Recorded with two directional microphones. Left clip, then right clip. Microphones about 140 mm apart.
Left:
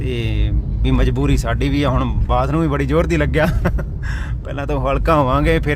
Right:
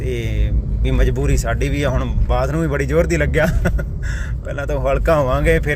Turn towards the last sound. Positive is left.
turn(degrees=20)  # may be behind; listen again after turning